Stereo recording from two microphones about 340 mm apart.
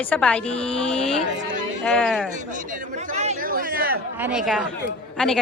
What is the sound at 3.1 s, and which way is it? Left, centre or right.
Chatter, right.